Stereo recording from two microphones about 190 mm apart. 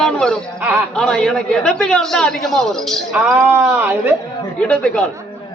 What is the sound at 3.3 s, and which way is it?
Speech, 10° right (ahead or behind).